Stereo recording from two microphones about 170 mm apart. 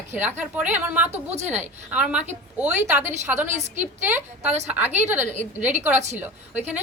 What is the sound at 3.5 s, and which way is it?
Speech, 45° right (ahead or behind).